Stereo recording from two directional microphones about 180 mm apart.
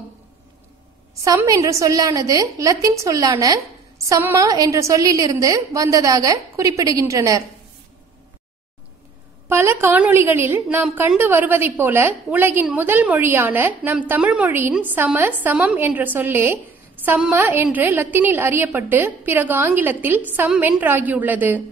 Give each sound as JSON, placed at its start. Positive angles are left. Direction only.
{"t": 1.2, "sound": "a woman's voice", "side_deg": -20}
{"t": 9.5, "sound": "a woman's voice", "side_deg": -15}